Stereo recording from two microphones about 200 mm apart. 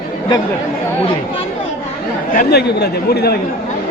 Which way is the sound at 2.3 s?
50° left (ahead or behind).